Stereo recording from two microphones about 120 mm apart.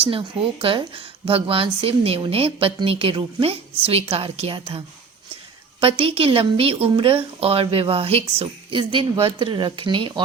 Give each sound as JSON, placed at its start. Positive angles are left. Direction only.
{"t": 0.0, "sound": "a woman's voice", "side_deg": -50}
{"t": 5.8, "sound": "a woman's voice", "side_deg": -50}